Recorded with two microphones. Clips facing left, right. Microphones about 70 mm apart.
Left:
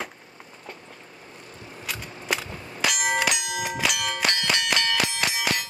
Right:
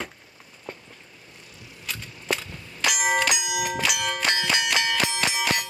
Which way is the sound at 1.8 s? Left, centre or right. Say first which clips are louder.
Left 1 dB; centre.